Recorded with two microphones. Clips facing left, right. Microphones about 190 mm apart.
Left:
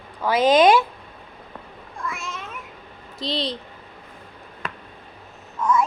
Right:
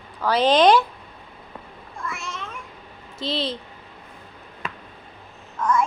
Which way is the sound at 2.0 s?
Centre (ahead or behind).